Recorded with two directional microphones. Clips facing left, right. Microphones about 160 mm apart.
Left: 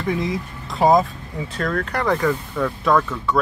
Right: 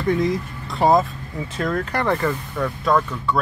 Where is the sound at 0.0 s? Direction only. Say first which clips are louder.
Right 3 dB; centre (ahead or behind).